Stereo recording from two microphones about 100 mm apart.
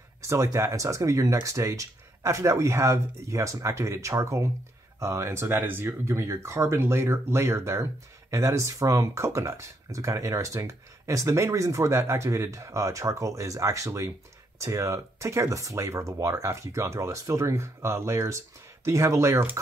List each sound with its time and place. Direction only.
0.2 s speech: 30° right (ahead or behind)